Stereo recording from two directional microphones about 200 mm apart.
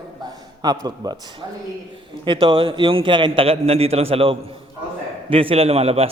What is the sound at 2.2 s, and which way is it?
A man's voice, 25° right (ahead or behind).